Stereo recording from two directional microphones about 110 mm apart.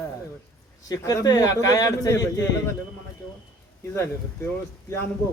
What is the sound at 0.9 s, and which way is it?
Speech, 35° left (ahead or behind).